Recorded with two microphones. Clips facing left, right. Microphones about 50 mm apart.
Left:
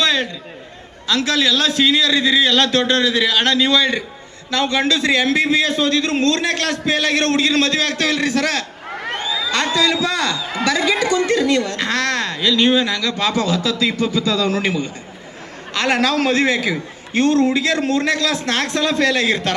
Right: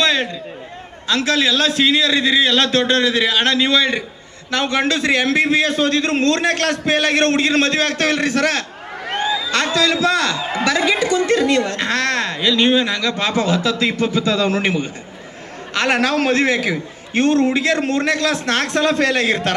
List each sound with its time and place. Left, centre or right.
0.0 s a sound: right
1.0 s speech: right
4.5 s a man's voice: right
9.1 s a sound: right
9.9 s a man's voice: right
11.9 s a man's voice: right